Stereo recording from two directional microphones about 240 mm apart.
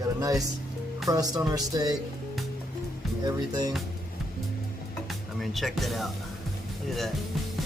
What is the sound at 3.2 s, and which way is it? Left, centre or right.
Speech, centre.